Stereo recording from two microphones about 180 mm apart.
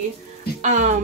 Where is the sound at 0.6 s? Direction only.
45° right (ahead or behind).